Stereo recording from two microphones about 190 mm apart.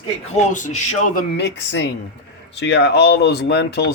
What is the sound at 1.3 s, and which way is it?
Speech, 65° left (ahead or behind).